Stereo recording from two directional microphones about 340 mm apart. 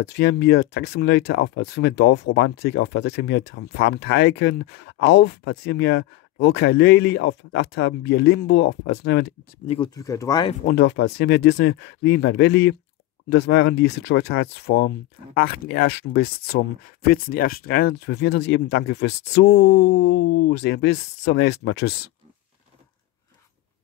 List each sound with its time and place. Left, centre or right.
0.0 s speech: left
9.7 s speech: centre
10.7 s speech: left